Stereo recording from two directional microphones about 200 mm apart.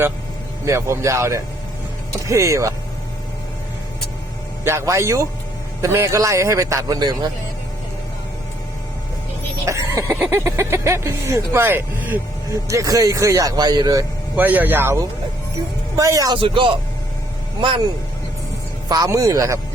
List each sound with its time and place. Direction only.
0.6 s speech: 15° right (ahead or behind)
4.6 s speech: 15° right (ahead or behind)
9.6 s speech: 15° right (ahead or behind)
14.3 s speech: 10° right (ahead or behind); by 16.7 s 25° right (ahead or behind)
18.9 s speech: 20° right (ahead or behind)